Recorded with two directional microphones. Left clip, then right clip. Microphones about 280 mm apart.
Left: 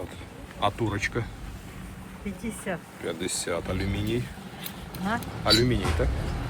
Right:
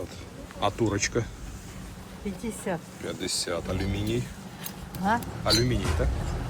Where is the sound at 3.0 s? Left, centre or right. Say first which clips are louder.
Even; centre.